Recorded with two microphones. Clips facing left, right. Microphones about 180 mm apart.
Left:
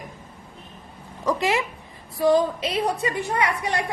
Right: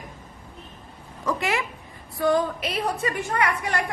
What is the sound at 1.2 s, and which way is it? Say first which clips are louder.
A woman's voice: left 3 dB; 20° left (ahead or behind).